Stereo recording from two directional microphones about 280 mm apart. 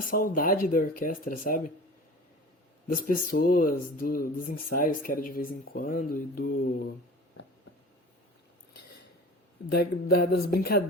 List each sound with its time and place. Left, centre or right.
0.1 s speech: left
2.8 s speech: left
9.7 s speech: left